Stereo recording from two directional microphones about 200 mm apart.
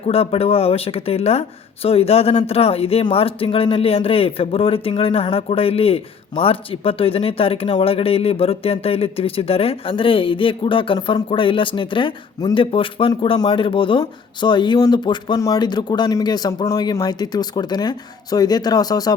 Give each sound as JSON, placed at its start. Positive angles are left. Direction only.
{"t": 0.0, "sound": "speech", "side_deg": 30}